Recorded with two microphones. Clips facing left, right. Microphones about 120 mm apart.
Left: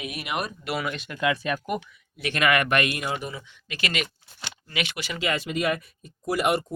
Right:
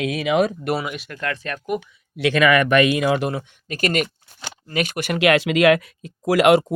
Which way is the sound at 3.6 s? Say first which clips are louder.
Right 8 dB; 45° right (ahead or behind).